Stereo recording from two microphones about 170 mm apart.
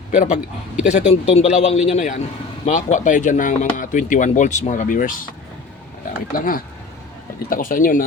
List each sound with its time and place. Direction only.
0.1 s a man's voice: 45° left (ahead or behind)
6.3 s speech: 55° left (ahead or behind)